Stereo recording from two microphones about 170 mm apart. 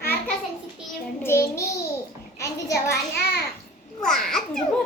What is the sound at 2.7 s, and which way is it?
Child singing, 70° left (ahead or behind).